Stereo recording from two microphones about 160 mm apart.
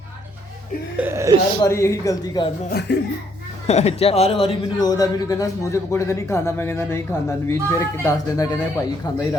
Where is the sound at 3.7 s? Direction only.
40° left (ahead or behind).